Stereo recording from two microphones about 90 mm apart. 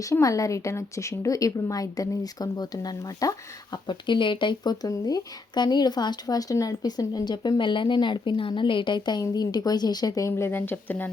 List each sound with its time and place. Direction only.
0.0 s a woman's voice: 40° left (ahead or behind)
3.8 s speech: 60° left (ahead or behind)
9.2 s speech: 45° left (ahead or behind)
10.2 s speech: 30° left (ahead or behind)